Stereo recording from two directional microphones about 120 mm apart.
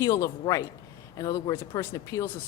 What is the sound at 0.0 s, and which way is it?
Speech, 30° left (ahead or behind).